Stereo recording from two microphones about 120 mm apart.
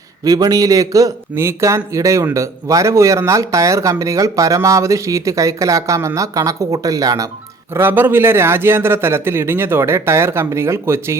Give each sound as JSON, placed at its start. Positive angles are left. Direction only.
{"t": 0.3, "sound": "a man's voice", "side_deg": -30}
{"t": 7.7, "sound": "a man's voice", "side_deg": -20}